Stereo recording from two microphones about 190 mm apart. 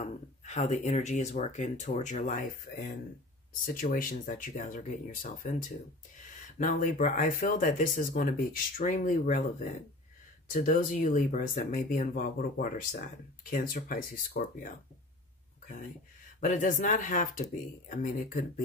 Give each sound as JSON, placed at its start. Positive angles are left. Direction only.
{"t": 0.0, "sound": "speech", "side_deg": 35}
{"t": 16.3, "sound": "speech", "side_deg": 45}